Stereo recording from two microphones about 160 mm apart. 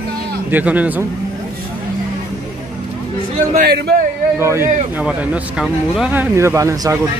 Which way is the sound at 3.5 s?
80° right.